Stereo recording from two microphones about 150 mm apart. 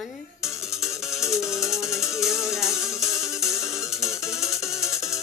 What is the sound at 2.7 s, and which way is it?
Music, 20° left (ahead or behind).